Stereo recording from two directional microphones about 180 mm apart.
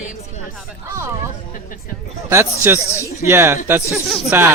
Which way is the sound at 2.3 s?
15° right (ahead or behind).